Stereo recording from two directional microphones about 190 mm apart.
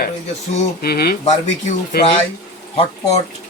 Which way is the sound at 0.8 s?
55° left (ahead or behind).